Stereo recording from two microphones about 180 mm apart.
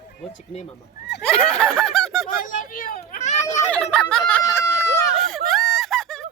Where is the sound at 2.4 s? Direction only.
50° left (ahead or behind).